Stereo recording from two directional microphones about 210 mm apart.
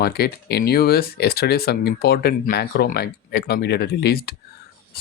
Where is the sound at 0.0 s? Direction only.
50° left (ahead or behind).